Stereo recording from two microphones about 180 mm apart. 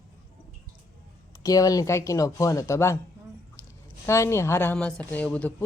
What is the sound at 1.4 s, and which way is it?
A woman's voice, 20° left (ahead or behind).